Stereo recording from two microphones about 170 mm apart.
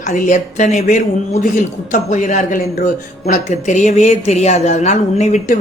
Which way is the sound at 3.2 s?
45° left (ahead or behind).